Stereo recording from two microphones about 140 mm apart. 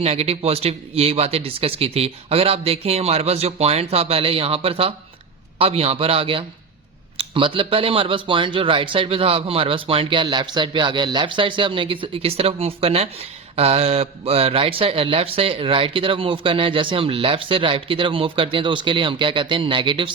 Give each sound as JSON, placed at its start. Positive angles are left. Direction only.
{"t": 0.0, "sound": "a man's voice", "side_deg": -45}